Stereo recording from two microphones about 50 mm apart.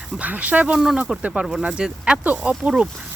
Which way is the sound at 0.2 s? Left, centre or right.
Right.